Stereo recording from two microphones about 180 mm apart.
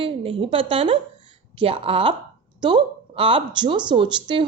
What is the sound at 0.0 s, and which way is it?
Speech, 30° right (ahead or behind).